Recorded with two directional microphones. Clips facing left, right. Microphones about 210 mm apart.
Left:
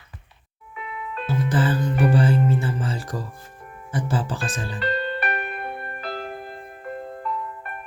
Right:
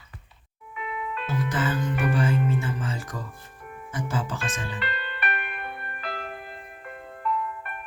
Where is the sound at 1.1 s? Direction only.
35° left (ahead or behind).